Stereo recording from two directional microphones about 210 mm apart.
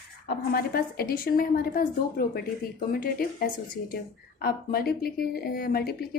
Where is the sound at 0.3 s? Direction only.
45° left (ahead or behind).